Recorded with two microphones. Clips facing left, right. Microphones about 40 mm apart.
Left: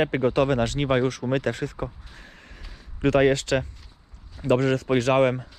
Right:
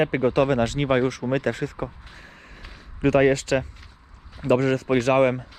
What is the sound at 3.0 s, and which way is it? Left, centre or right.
Speech, right.